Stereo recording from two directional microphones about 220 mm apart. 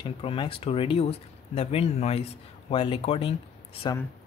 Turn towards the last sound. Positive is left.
turn(degrees=25)  # may be behind; listen again after turning